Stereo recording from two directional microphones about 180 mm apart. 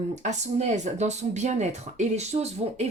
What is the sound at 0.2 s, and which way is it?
Speech, 40° right (ahead or behind).